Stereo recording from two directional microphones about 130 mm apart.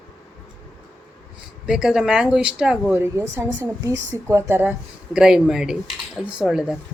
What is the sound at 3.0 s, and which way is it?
A woman's voice, 20° right (ahead or behind).